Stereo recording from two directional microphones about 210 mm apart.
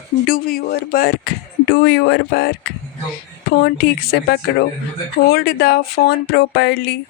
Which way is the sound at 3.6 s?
50° left (ahead or behind).